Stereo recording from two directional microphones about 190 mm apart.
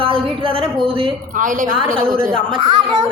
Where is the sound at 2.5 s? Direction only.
25° right (ahead or behind).